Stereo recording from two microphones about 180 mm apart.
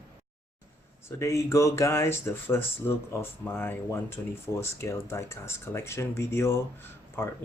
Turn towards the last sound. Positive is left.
turn(degrees=15)  # may be behind; listen again after turning